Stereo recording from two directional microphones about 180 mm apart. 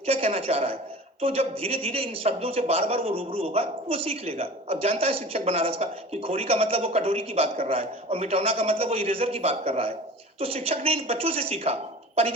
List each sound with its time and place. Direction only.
0.0 s a woman's voice: 35° right (ahead or behind)